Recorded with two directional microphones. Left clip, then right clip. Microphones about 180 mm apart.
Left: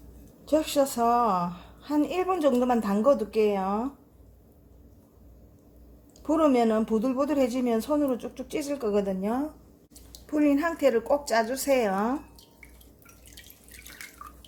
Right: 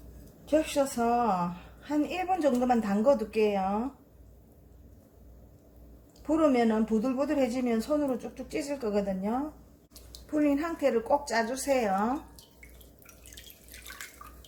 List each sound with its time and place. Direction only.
0.5 s speech: 45° left (ahead or behind)
6.2 s speech: 40° left (ahead or behind)
10.3 s speech: 40° left (ahead or behind)